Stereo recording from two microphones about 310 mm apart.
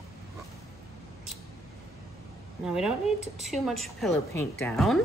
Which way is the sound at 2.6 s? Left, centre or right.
Centre.